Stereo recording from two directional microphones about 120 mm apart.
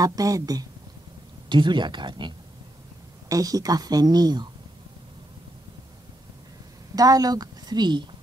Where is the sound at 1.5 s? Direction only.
40° right (ahead or behind).